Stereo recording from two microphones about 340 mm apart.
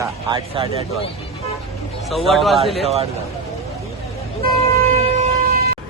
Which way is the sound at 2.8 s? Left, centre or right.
Centre.